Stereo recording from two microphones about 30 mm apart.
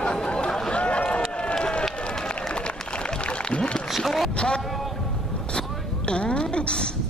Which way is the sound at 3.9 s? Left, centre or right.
Centre.